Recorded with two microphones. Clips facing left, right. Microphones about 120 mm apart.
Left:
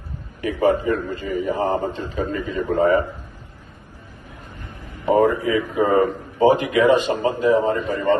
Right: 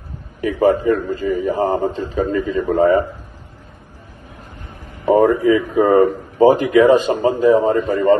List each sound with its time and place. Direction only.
0.4 s a man's voice: 40° right (ahead or behind)
5.4 s a man's voice: 40° right (ahead or behind)